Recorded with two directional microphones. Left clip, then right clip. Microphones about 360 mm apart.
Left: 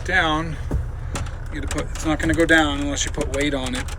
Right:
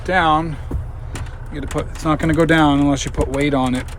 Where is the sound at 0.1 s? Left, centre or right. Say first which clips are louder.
Right 5 dB; centre.